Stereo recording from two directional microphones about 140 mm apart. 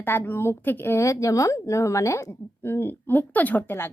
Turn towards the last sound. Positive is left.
turn(degrees=15)  # may be behind; listen again after turning